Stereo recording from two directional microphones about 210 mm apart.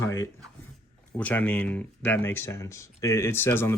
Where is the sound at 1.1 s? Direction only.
10° left (ahead or behind).